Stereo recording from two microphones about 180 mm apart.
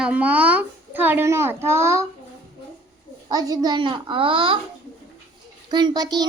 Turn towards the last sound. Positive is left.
turn(degrees=-20)  # may be behind; listen again after turning